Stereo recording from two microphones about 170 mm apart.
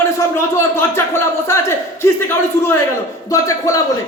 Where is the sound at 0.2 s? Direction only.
15° left (ahead or behind).